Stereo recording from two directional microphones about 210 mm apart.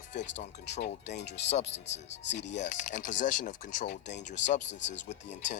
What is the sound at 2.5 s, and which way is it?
Speech, 35° left (ahead or behind).